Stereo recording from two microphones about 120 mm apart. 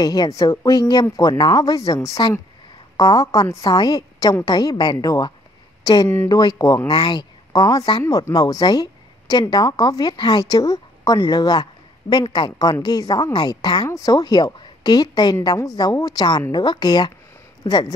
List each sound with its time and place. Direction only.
0.0 s a woman's voice: 35° left (ahead or behind)